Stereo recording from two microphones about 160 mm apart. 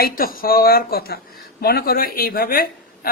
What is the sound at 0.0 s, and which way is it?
A woman's voice, 65° left (ahead or behind).